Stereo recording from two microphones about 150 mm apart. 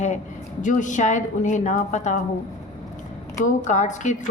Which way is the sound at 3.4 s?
55° left (ahead or behind).